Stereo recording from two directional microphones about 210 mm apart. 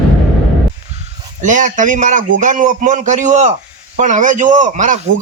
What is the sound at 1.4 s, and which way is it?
A man's voice, 35° right (ahead or behind).